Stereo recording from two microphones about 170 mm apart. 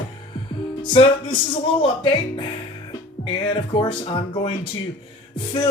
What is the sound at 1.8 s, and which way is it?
Speech, 30° left (ahead or behind).